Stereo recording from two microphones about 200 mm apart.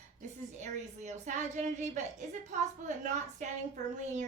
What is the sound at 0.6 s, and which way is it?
A woman's voice, 35° right (ahead or behind).